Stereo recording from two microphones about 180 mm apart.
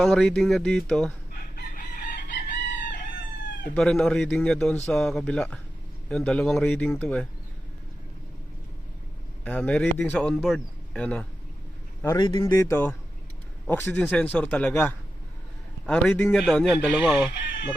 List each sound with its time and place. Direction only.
0.0 s a man's voice: 5° left (ahead or behind)
1.5 s chicken: 55° left (ahead or behind)
3.8 s a man's voice: 5° left (ahead or behind)
9.4 s a man's voice: 5° left (ahead or behind)
12.0 s a man's voice: 25° left (ahead or behind); by 17.3 s 5° right (ahead or behind)